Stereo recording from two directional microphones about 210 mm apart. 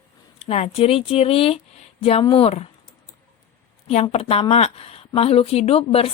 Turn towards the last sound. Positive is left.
turn(degrees=30)  # may be behind; listen again after turning